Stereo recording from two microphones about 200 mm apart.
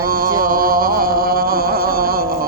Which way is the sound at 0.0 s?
45° right (ahead or behind).